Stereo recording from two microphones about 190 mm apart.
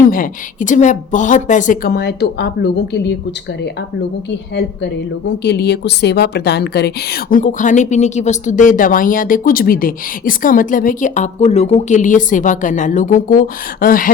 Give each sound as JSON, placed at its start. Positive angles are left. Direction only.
{"t": 0.1, "sound": "a woman's voice", "side_deg": 45}
{"t": 5.4, "sound": "a woman's voice", "side_deg": 60}